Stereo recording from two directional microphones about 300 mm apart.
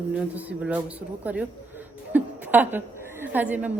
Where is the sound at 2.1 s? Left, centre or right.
Centre.